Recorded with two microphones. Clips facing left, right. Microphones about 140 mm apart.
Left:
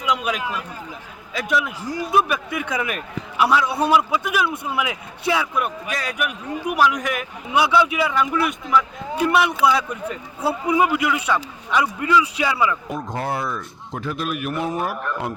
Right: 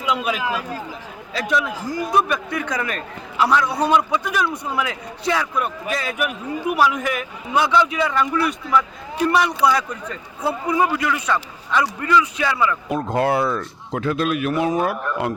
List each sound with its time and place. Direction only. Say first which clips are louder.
0.0 s speech: right 1 dB; centre (ahead or behind)
0.4 s a man's voice: right 4 dB; 90° right
1.4 s a man's voice: right 1 dB; 5° left (ahead or behind)
12.9 s a man's voice: right 6 dB; 70° right (ahead or behind); by 15.3 s 90° right